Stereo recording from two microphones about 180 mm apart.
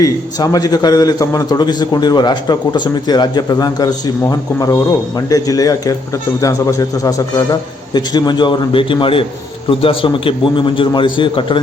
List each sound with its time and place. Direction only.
0.0 s a man's voice: 20° left (ahead or behind)